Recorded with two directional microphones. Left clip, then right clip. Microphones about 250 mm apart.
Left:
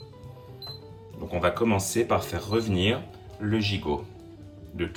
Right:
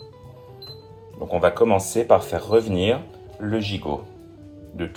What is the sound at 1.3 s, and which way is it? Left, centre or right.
Speech, centre.